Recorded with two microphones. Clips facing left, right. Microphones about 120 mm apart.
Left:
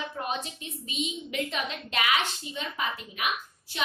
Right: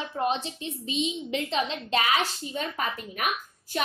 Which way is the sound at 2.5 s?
45° right (ahead or behind).